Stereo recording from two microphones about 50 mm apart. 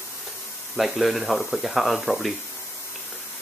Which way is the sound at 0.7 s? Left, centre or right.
Centre.